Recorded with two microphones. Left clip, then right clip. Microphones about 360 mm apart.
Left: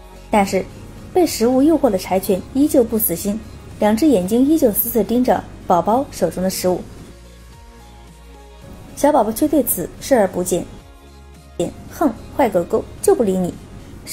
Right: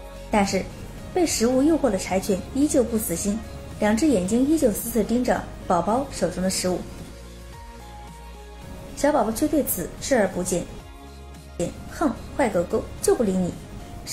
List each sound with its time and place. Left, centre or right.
0.3 s a woman's voice: left
8.9 s a woman's voice: left